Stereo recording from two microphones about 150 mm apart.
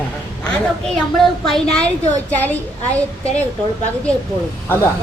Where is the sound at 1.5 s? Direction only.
5° left (ahead or behind).